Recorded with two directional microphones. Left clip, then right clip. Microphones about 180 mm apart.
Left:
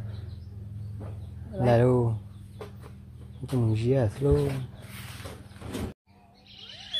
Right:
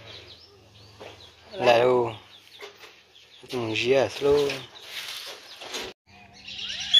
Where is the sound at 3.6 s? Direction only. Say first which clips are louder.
Right 6 dB; centre (ahead or behind).